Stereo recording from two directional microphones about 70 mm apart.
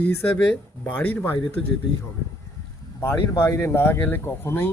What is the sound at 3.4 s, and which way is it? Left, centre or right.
Speech, left.